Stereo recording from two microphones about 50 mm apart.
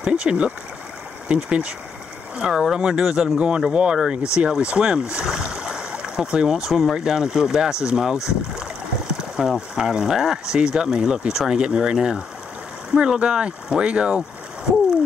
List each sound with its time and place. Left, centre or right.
0.0 s speech: centre
2.3 s speech: centre
3.3 s speech: centre
5.5 s stream: centre
6.6 s speech: centre
7.0 s speech: centre